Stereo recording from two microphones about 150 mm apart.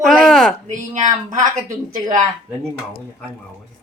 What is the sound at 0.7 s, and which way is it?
Speech, 55° right (ahead or behind).